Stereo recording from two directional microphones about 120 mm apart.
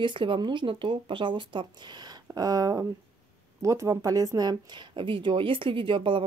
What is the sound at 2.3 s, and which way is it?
Speech, 30° right (ahead or behind).